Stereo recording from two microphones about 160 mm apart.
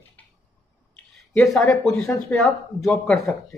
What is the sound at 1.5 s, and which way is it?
A man's voice, 5° left (ahead or behind).